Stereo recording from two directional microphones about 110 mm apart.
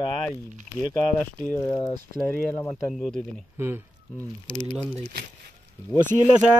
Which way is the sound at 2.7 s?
5° left (ahead or behind).